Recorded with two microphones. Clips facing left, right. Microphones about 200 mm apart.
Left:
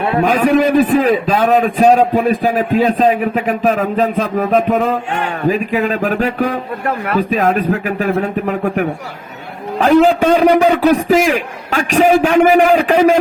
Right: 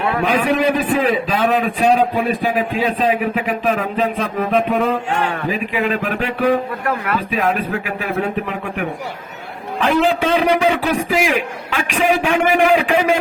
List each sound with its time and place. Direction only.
0.2 s a man's voice: 45° left (ahead or behind)